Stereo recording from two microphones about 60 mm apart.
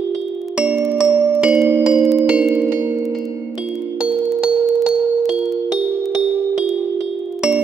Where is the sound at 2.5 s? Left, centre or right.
Right.